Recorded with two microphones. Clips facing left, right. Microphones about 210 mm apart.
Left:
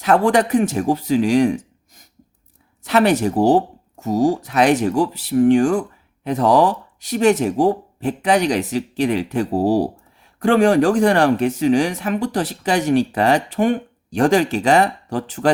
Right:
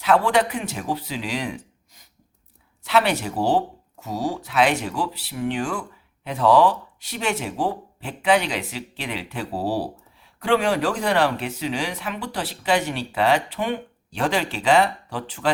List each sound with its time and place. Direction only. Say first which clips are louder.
0.0 s speech: left 4 dB; 45° left (ahead or behind)